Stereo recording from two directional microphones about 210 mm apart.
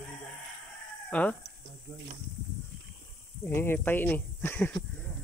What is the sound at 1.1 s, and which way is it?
Speech, 5° left (ahead or behind).